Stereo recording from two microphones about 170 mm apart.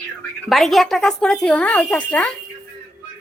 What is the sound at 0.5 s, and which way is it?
Speech, centre (ahead or behind).